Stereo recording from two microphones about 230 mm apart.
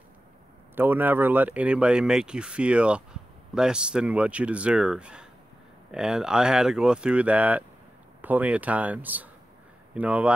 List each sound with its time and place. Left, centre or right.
0.7 s speech: centre